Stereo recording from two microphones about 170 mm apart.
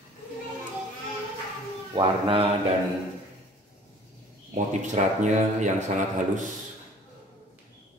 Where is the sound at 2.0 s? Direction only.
30° right (ahead or behind).